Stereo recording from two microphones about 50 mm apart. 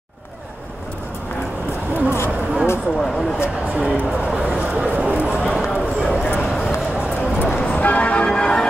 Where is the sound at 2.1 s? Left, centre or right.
Left.